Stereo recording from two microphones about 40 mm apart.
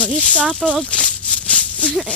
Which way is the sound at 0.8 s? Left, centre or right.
Left.